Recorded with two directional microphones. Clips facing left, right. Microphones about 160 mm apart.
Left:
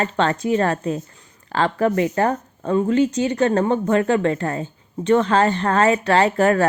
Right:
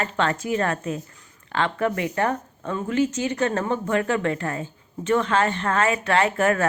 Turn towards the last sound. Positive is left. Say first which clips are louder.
# left 4 dB
turn(degrees=35)  # may be behind; listen again after turning